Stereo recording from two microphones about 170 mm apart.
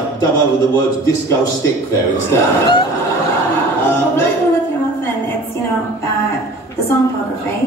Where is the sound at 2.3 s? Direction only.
25° left (ahead or behind).